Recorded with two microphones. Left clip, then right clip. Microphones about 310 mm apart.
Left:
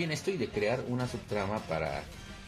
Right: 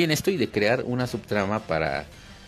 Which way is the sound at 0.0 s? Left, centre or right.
Right.